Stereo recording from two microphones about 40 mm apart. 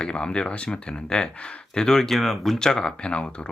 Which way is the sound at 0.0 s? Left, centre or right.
Left.